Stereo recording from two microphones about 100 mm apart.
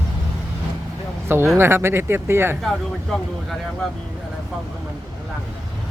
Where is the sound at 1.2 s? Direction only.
25° right (ahead or behind).